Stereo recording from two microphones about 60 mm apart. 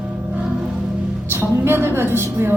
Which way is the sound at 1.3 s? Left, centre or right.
Right.